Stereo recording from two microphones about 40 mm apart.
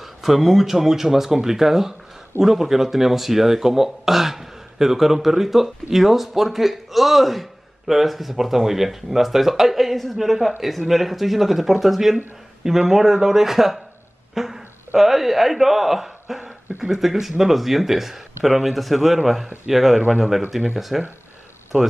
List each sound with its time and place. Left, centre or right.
0.0 s speech: centre
14.3 s a sound: centre
15.0 s speech: centre